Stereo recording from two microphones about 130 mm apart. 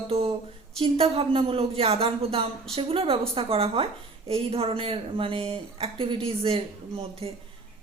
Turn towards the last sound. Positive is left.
turn(degrees=-50)  # may be behind; listen again after turning